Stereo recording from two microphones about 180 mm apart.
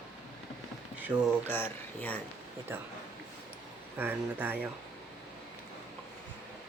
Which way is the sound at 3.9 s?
10° right (ahead or behind).